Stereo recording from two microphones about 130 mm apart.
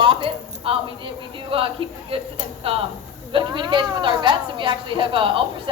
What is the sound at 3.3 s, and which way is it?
A woman's voice, 35° right (ahead or behind).